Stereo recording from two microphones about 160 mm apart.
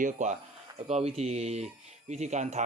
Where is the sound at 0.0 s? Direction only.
50° right (ahead or behind).